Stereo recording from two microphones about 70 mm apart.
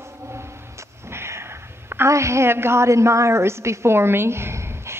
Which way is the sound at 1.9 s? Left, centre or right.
Right.